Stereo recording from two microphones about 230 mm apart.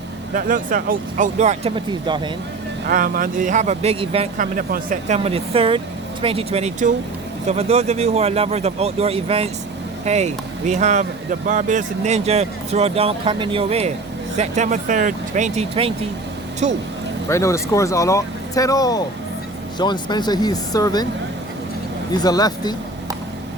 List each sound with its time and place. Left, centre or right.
0.3 s speech: right; by 2.3 s centre
2.8 s speech: right
17.2 s speech: centre
22.1 s speech: centre